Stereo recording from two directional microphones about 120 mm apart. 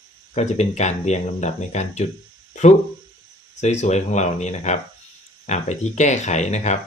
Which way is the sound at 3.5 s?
75° left (ahead or behind).